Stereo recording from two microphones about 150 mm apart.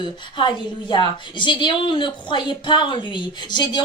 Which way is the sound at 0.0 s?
30° left (ahead or behind).